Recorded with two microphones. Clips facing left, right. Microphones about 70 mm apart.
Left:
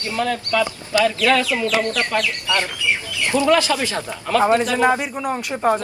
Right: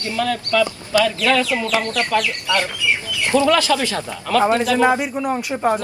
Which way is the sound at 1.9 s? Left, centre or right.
Left.